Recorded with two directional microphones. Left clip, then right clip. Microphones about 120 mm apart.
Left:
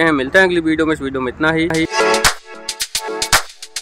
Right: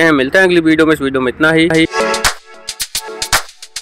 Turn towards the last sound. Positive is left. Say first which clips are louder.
# even
turn(degrees=0)  # may be behind; listen again after turning